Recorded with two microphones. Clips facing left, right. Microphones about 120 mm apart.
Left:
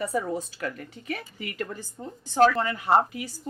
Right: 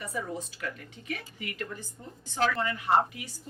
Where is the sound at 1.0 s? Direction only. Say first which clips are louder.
Left 3 dB; 35° left (ahead or behind).